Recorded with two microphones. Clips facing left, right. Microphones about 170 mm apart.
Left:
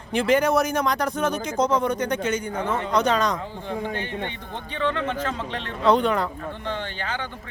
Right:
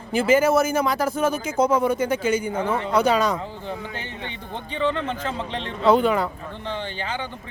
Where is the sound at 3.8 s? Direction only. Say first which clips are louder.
Left 5 dB; 55° left (ahead or behind).